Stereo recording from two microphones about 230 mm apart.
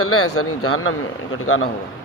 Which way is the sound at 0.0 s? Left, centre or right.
Left.